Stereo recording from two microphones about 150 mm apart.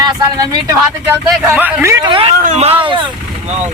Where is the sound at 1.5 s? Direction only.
10° right (ahead or behind).